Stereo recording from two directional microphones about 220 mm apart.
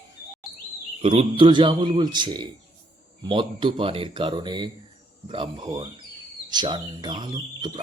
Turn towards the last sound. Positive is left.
turn(degrees=-20)  # may be behind; listen again after turning